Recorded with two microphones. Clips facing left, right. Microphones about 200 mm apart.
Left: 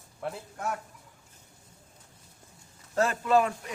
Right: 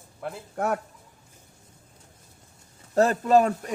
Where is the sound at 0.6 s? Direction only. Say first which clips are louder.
Right 8 dB; 60° right (ahead or behind).